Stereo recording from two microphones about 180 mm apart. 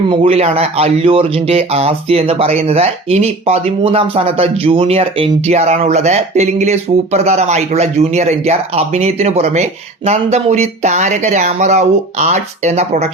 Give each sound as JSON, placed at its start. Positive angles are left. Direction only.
{"t": 0.1, "sound": "speech", "side_deg": -30}